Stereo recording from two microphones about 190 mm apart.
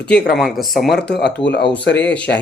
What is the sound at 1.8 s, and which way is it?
Speech, 65° left (ahead or behind).